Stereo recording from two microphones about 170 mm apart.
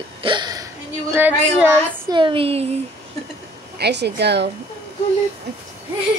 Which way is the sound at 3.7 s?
75° right (ahead or behind).